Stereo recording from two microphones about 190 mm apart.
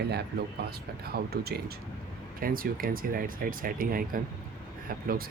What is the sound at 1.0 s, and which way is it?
Speech, 55° right (ahead or behind).